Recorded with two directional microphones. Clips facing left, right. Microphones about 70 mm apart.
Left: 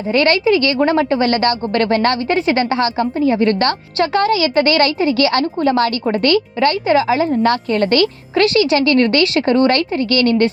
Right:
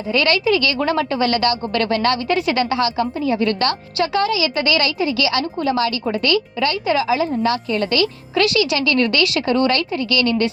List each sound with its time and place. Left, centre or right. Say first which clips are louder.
0.1 s a woman's voice: left 4 dB; left